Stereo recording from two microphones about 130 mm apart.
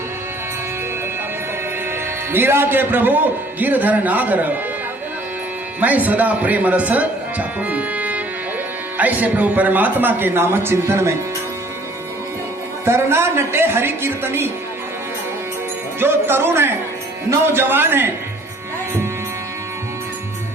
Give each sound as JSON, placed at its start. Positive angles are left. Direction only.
{"t": 2.3, "sound": "speech", "side_deg": -15}
{"t": 5.8, "sound": "speech", "side_deg": -10}
{"t": 12.8, "sound": "speech", "side_deg": -20}
{"t": 16.0, "sound": "speech", "side_deg": -15}